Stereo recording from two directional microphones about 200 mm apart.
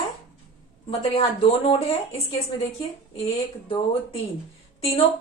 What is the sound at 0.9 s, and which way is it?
Speech, 30° left (ahead or behind).